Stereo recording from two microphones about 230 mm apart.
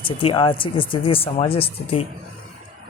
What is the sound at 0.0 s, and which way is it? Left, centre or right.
Speech, left.